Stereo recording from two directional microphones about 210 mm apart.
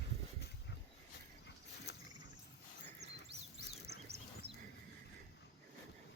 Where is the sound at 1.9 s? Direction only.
50° left (ahead or behind).